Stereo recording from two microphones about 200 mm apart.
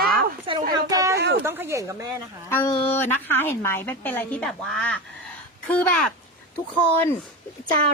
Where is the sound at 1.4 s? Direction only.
10° right (ahead or behind).